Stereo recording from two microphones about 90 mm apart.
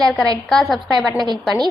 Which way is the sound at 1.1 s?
50° right (ahead or behind).